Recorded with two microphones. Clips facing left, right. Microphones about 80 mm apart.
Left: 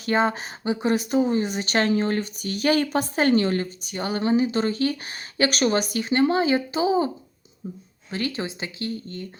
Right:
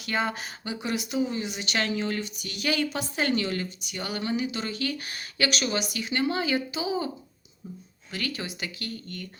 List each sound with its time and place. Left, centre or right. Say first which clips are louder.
0.0 s speech: left 7 dB; left
5.5 s speech: left 7 dB; left
8.1 s speech: left 5 dB; left